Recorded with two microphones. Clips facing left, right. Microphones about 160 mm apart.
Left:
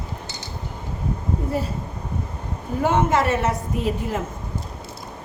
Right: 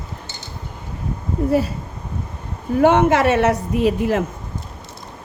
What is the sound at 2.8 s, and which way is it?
A woman's voice, 70° right (ahead or behind).